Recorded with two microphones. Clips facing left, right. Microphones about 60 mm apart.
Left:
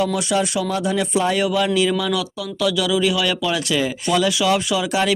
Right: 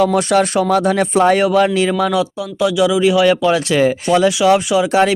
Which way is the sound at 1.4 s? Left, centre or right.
Right.